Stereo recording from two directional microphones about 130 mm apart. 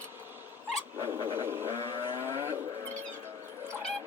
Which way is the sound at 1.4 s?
15° right (ahead or behind).